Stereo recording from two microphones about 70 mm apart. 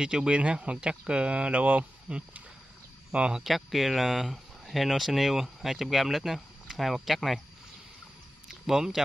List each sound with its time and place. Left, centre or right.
0.0 s speech: centre
3.4 s speech: centre
8.5 s speech: centre